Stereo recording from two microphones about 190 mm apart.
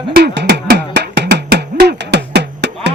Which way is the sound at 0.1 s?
60° right (ahead or behind).